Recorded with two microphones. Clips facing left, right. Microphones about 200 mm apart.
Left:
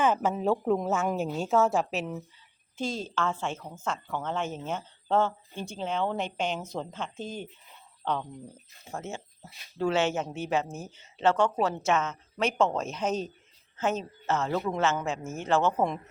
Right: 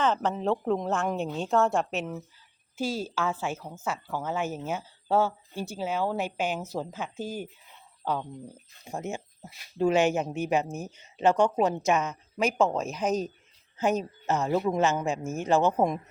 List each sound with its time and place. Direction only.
0.0 s speech: 10° left (ahead or behind); by 16.0 s 15° right (ahead or behind)